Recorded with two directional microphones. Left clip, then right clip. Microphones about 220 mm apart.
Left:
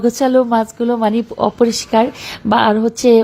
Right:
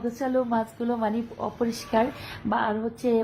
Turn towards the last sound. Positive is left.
turn(degrees=35)  # may be behind; listen again after turning